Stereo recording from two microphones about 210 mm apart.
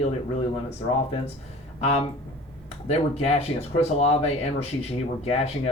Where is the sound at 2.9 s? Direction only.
30° left (ahead or behind).